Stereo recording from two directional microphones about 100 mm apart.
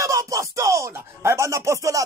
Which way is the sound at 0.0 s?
30° right (ahead or behind).